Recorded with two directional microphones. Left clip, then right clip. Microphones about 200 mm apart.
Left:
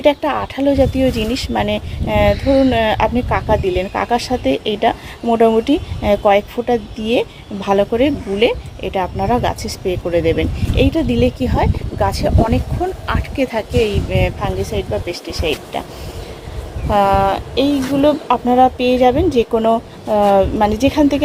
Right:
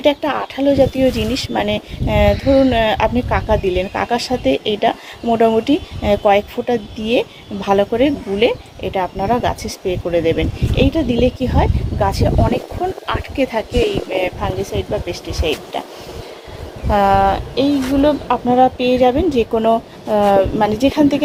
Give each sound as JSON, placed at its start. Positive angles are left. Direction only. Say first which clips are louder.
{"t": 0.0, "sound": "speech", "louder": "left 1 dB", "side_deg": 5}
{"t": 16.9, "sound": "speech", "louder": "even", "side_deg": 10}